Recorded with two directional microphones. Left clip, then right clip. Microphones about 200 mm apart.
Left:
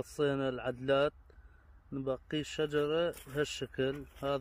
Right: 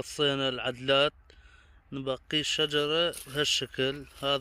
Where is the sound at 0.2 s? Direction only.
10° right (ahead or behind).